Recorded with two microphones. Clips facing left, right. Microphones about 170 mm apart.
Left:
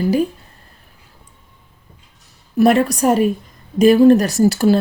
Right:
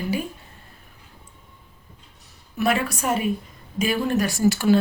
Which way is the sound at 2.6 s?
40° left (ahead or behind).